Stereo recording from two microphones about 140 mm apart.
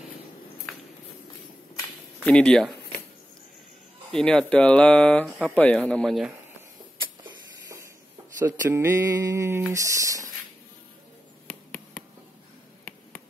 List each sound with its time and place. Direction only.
2.2 s speech: 10° left (ahead or behind)
4.1 s speech: 5° left (ahead or behind)
8.5 s mantra: 20° right (ahead or behind)
11.4 s a sound: 10° left (ahead or behind)